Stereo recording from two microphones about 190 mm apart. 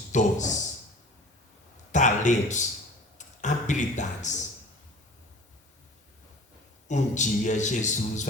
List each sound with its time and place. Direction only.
0.1 s speech: 40° left (ahead or behind)
1.9 s a sound: 40° left (ahead or behind)
3.2 s speech: 40° left (ahead or behind)
6.8 s a man's voice: 40° left (ahead or behind)